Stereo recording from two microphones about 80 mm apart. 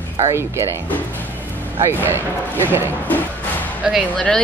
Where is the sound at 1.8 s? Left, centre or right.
Right.